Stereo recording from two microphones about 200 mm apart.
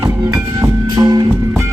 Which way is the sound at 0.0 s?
20° right (ahead or behind).